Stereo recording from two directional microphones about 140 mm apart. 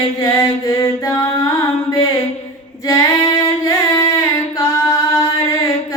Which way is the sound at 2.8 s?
25° left (ahead or behind).